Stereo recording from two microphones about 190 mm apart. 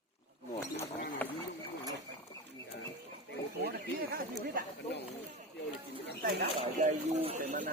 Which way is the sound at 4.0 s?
55° right (ahead or behind).